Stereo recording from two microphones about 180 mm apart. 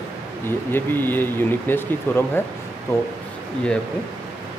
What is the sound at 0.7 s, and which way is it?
Speech, 10° left (ahead or behind).